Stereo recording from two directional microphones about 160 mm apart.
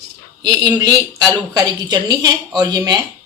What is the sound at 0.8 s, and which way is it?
Speech, 25° right (ahead or behind).